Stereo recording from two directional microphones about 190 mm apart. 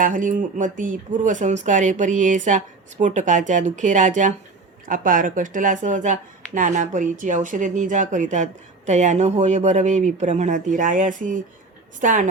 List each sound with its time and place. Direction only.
0.0 s a woman's voice: 45° right (ahead or behind)